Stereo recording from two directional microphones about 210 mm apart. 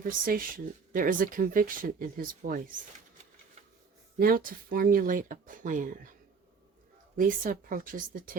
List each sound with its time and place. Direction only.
0.0 s speech: 40° right (ahead or behind)
4.2 s speech: 45° right (ahead or behind)
7.2 s speech: 40° right (ahead or behind)